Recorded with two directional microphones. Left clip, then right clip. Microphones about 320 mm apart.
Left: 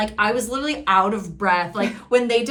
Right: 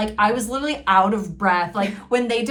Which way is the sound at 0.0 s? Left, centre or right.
Centre.